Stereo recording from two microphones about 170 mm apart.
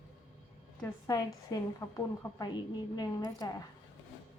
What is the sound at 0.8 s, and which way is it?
A woman's voice, 20° left (ahead or behind).